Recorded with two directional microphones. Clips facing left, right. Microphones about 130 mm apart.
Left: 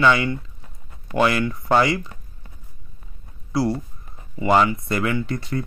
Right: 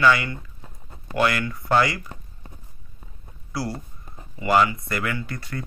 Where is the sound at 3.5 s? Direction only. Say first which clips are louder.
Left 8 dB; 25° left (ahead or behind).